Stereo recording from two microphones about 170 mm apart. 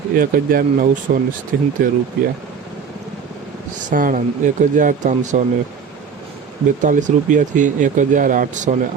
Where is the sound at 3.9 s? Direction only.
50° right (ahead or behind).